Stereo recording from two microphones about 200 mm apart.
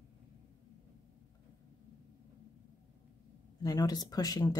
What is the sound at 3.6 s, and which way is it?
Speech, 20° left (ahead or behind).